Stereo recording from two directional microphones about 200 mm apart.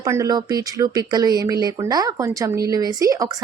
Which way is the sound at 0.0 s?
15° right (ahead or behind).